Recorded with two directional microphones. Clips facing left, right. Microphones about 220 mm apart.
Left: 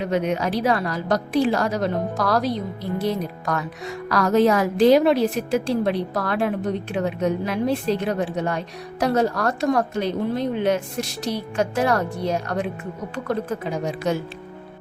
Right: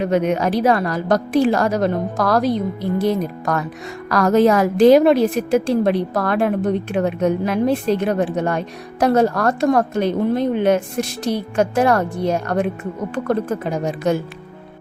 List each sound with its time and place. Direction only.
0.0 s a woman's voice: 50° right (ahead or behind)
14.0 s a woman's voice: 50° right (ahead or behind)